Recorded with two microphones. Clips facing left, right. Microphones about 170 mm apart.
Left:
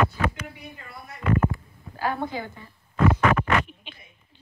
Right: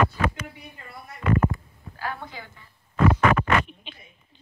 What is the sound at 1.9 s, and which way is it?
Speech, 40° left (ahead or behind).